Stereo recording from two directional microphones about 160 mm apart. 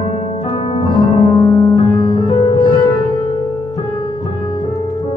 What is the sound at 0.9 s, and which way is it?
Music, 25° left (ahead or behind).